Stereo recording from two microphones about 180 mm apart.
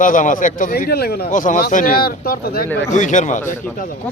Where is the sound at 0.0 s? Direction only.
45° left (ahead or behind).